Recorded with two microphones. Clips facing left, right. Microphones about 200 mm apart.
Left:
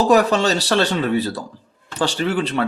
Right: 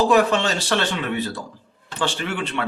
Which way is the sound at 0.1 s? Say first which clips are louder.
Left 3 dB; 40° left (ahead or behind).